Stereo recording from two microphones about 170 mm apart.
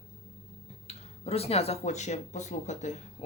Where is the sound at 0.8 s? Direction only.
35° left (ahead or behind).